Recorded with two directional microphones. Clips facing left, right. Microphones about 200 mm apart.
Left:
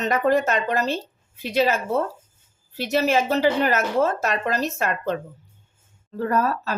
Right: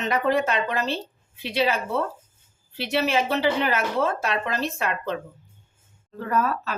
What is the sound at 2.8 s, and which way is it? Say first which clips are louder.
Speech: left 3 dB; 40° left (ahead or behind).